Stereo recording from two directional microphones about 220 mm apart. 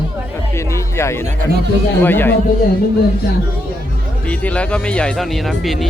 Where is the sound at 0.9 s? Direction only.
10° left (ahead or behind).